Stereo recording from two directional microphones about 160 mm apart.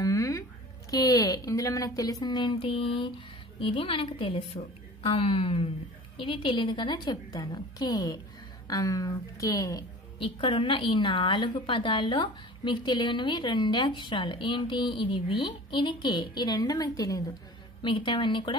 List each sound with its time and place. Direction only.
0.0 s a woman's voice: 20° left (ahead or behind)
10.1 s a woman's voice: 35° left (ahead or behind)